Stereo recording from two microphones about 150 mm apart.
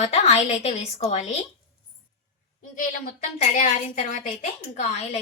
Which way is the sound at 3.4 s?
50° left (ahead or behind).